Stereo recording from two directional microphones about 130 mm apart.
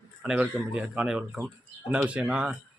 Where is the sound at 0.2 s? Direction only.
5° right (ahead or behind).